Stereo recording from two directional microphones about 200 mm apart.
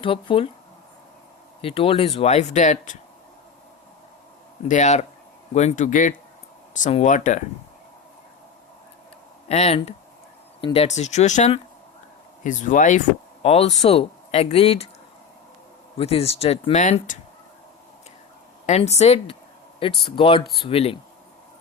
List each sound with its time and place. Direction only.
0.0 s speech: 25° left (ahead or behind)
1.6 s speech: 30° left (ahead or behind)
4.7 s speech: 35° left (ahead or behind)
9.5 s speech: 30° left (ahead or behind)
16.0 s speech: 30° left (ahead or behind)
18.6 s speech: 35° left (ahead or behind)